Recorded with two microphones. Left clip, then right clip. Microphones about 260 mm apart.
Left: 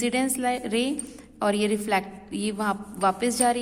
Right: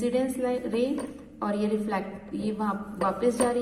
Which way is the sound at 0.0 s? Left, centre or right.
Left.